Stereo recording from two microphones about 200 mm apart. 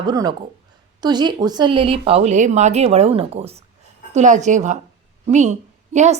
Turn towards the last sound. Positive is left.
turn(degrees=-35)  # may be behind; listen again after turning